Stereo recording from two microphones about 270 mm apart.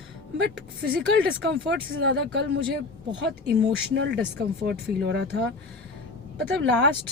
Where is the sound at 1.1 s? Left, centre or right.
Right.